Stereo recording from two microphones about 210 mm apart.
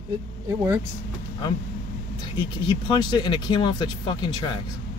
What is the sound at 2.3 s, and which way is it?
Speech, 20° left (ahead or behind).